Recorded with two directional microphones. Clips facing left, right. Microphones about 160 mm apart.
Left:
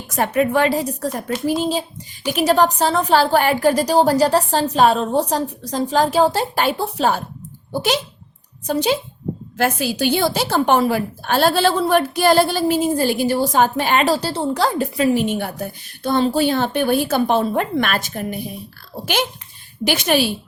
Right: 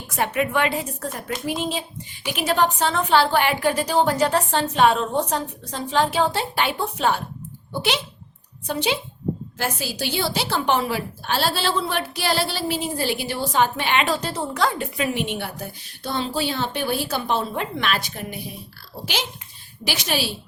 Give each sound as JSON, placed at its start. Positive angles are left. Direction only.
{"t": 0.3, "sound": "a woman's voice", "side_deg": 35}
{"t": 9.6, "sound": "a woman's voice", "side_deg": 60}
{"t": 19.8, "sound": "a woman's voice", "side_deg": 55}